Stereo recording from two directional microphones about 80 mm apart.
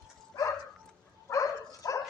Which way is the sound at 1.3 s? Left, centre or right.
Left.